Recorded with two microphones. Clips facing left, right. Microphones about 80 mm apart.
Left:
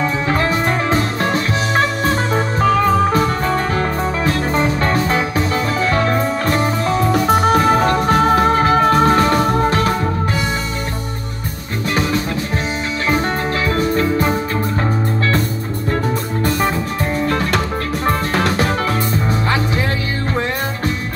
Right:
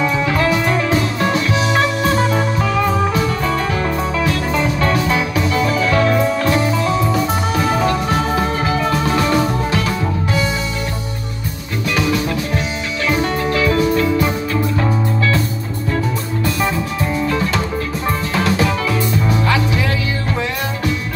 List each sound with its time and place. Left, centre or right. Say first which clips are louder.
0.0 s music: right 1 dB; left
13.1 s music: right 1 dB; left
18.0 s music: left 2 dB; left